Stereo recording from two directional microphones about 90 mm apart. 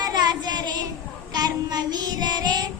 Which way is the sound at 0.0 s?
50° right (ahead or behind).